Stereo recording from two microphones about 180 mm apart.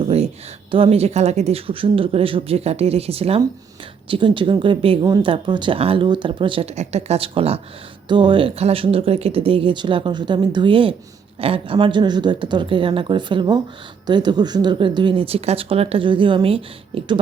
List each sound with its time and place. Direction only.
0.7 s speech: 30° right (ahead or behind)